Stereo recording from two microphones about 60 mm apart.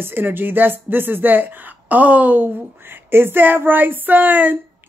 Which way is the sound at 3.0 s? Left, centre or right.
Right.